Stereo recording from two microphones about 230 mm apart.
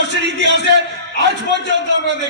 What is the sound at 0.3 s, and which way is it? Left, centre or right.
Speech, right.